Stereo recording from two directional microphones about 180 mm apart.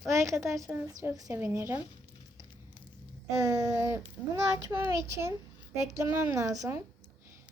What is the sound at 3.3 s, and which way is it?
A child's voice, 15° right (ahead or behind).